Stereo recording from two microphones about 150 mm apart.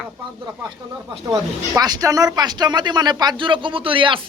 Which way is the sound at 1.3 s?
25° right (ahead or behind).